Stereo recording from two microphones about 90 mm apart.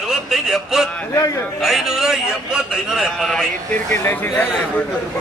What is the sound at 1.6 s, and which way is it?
A man's voice, 5° right (ahead or behind).